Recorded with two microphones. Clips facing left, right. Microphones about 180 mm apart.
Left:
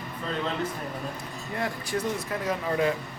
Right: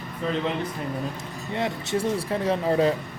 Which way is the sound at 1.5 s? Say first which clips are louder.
Right 4 dB; 25° right (ahead or behind).